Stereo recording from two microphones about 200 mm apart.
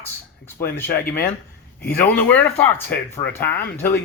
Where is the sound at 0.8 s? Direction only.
10° left (ahead or behind).